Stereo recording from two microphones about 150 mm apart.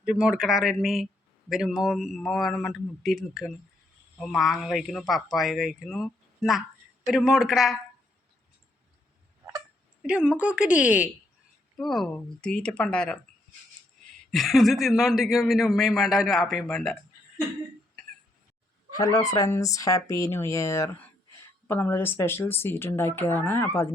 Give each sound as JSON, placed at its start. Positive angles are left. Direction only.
{"t": 0.0, "sound": "speech", "side_deg": -5}
{"t": 10.0, "sound": "a woman's voice", "side_deg": -5}
{"t": 14.3, "sound": "speech", "side_deg": 0}
{"t": 18.9, "sound": "speech", "side_deg": 25}